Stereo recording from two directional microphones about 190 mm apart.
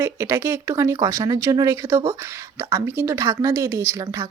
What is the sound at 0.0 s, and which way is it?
Speech, 15° right (ahead or behind).